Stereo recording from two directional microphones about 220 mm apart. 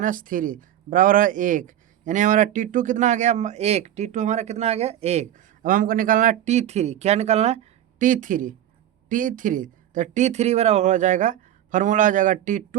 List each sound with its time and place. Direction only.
0.0 s speech: 40° right (ahead or behind)